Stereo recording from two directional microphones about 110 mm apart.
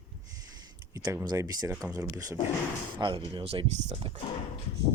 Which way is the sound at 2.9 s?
50° right (ahead or behind).